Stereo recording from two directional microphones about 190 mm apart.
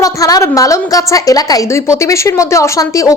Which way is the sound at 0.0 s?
20° left (ahead or behind).